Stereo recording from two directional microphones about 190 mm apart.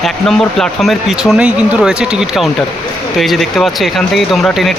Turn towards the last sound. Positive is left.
turn(degrees=0)  # may be behind; listen again after turning